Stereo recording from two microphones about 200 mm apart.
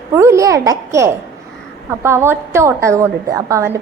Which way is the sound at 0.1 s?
15° right (ahead or behind).